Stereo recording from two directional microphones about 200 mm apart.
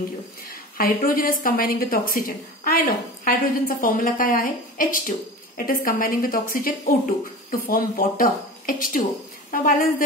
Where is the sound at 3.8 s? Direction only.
40° left (ahead or behind).